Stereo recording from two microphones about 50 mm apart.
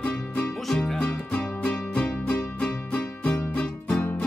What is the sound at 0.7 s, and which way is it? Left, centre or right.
Music, centre.